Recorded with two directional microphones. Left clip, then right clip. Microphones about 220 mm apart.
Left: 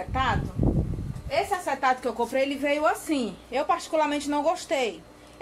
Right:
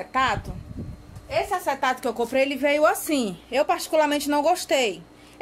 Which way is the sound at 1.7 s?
45° right (ahead or behind).